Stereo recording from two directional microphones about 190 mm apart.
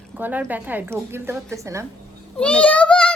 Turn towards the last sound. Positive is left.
turn(degrees=5)  # may be behind; listen again after turning